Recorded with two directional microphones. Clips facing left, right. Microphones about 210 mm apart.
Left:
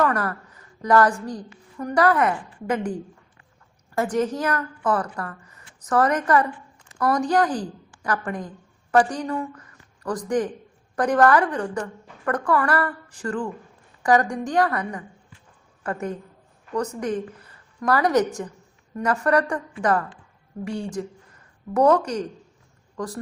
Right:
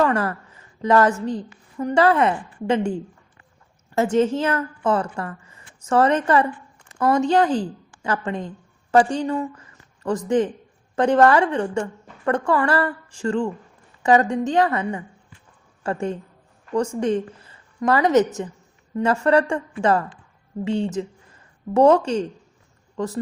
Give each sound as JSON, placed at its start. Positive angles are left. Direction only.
{"t": 0.0, "sound": "a woman's voice", "side_deg": -25}